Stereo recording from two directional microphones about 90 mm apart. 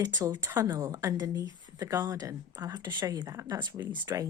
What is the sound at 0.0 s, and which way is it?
Speech, 45° right (ahead or behind).